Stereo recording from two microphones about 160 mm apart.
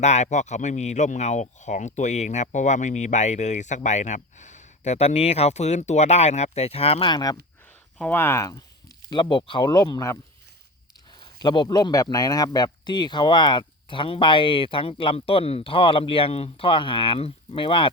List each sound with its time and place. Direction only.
0.0 s speech: 45° left (ahead or behind); by 7.3 s 25° left (ahead or behind)
7.9 s speech: 10° left (ahead or behind)
9.0 s speech: 30° left (ahead or behind)
11.2 s a man's voice: 30° left (ahead or behind)